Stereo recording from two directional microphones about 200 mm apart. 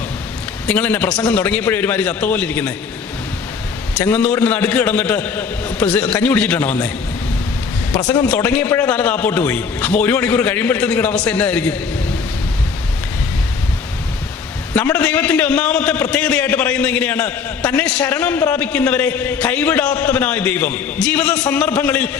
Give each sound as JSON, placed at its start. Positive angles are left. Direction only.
{"t": 0.7, "sound": "a man's voice", "side_deg": 5}
{"t": 3.9, "sound": "a man's voice", "side_deg": 5}
{"t": 8.0, "sound": "a man's voice", "side_deg": 20}
{"t": 8.3, "sound": "a man's voice", "side_deg": 10}
{"t": 14.7, "sound": "a man's voice", "side_deg": 5}